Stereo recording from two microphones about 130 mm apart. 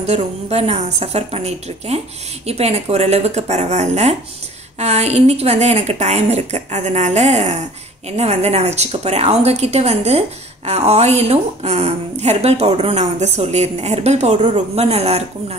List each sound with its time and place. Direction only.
0.0 s a woman's voice: 55° right (ahead or behind)